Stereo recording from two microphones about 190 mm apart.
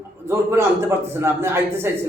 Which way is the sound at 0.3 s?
15° right (ahead or behind).